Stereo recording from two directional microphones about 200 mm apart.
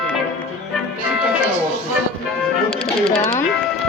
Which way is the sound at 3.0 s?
30° left (ahead or behind).